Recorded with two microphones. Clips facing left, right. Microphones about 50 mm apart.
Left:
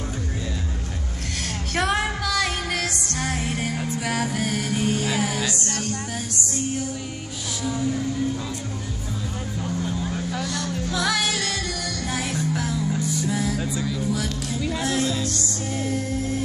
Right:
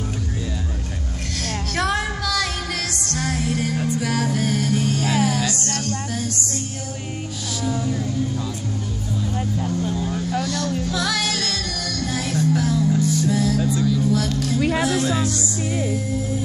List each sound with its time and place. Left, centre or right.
1.4 s music: centre
10.1 s music: centre
14.6 s music: right